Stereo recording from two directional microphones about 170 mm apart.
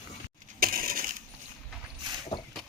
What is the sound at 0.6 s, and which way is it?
Crushing, 55° right (ahead or behind).